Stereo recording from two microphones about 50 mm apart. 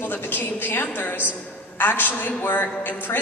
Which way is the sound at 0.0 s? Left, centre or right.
Left.